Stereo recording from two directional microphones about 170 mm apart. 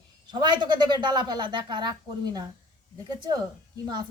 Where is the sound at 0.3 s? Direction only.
25° right (ahead or behind).